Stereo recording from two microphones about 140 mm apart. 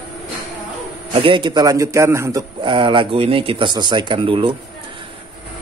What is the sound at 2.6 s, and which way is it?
Speech, 35° right (ahead or behind).